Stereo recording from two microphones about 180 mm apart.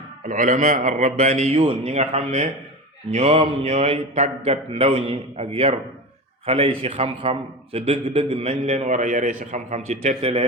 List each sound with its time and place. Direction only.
0.3 s a man's voice: 45° right (ahead or behind)